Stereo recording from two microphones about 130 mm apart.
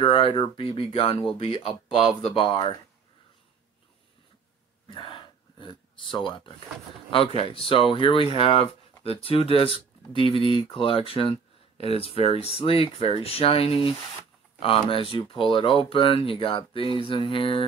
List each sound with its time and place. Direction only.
0.0 s speech: 40° left (ahead or behind)
4.8 s a sound: 40° left (ahead or behind)
7.3 s speech: 45° left (ahead or behind)